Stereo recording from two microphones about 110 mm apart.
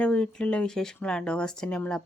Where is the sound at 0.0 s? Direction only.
10° left (ahead or behind).